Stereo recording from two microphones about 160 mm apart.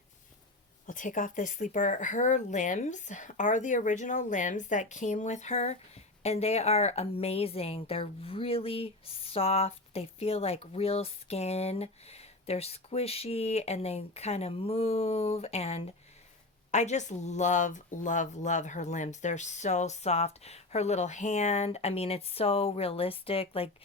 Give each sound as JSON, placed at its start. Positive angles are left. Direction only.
{"t": 0.9, "sound": "a woman's voice", "side_deg": 55}